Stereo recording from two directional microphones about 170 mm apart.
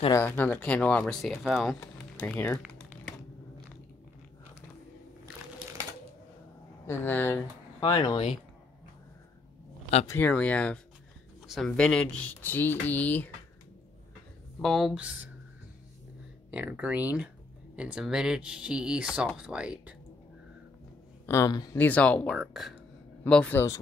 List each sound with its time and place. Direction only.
0.1 s speech: 15° left (ahead or behind)
2.1 s speech: 10° left (ahead or behind)
2.6 s typing: centre (ahead or behind)
6.9 s speech: 10° left (ahead or behind)
7.8 s speech: 25° left (ahead or behind)
10.0 s speech: 10° left (ahead or behind)
14.6 s speech: centre (ahead or behind)
16.4 s speech: 10° right (ahead or behind)
21.3 s speech: 20° left (ahead or behind)
21.7 s speech: 10° left (ahead or behind)